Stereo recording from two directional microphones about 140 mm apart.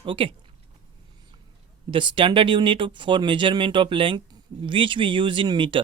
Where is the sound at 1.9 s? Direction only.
35° right (ahead or behind).